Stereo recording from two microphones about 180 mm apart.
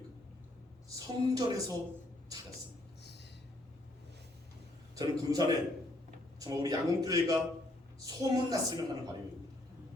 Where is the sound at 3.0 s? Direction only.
70° left (ahead or behind).